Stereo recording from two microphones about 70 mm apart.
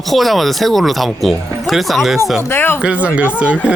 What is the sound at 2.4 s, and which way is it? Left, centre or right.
Speech, left.